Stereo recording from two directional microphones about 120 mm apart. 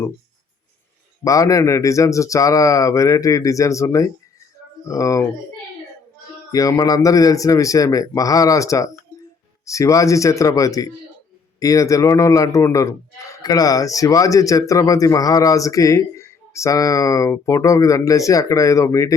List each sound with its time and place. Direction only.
1.2 s a man's voice: 30° left (ahead or behind)
6.5 s a man's voice: 30° left (ahead or behind)